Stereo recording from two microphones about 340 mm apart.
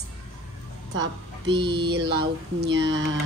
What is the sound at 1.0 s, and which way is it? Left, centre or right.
Speech, right.